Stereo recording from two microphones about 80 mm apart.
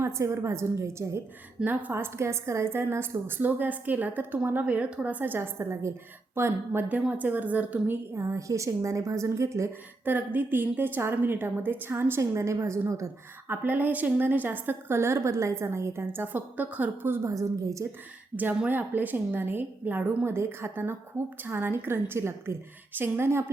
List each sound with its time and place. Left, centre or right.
0.0 s a woman's voice: right
1.6 s a woman's voice: right
6.8 s a woman's voice: centre
8.1 s a woman's voice: right
10.1 s a woman's voice: right
13.5 s a woman's voice: right
17.2 s a woman's voice: right
18.3 s a woman's voice: right